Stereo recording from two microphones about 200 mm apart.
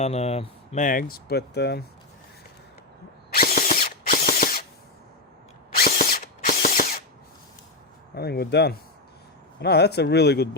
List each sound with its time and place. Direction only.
0.0 s speech: 30° left (ahead or behind); by 1.8 s 55° left (ahead or behind)
3.3 s drill: 45° left (ahead or behind)
5.8 s drill: 45° left (ahead or behind)
8.1 s speech: 50° left (ahead or behind)